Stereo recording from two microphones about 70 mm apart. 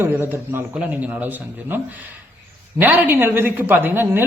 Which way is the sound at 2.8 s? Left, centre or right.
Right.